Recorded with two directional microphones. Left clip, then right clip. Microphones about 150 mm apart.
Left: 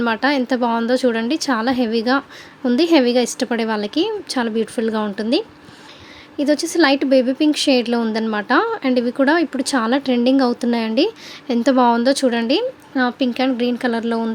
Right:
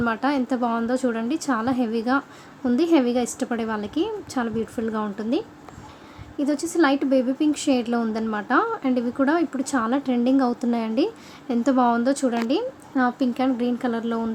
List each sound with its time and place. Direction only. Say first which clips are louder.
0.0 s a woman's voice: left 5 dB; 15° left (ahead or behind)